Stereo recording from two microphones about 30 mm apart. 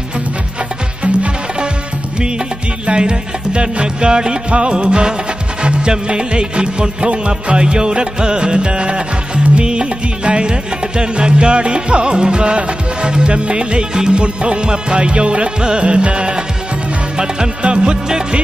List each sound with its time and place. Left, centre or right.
2.1 s music: right
17.6 s music: right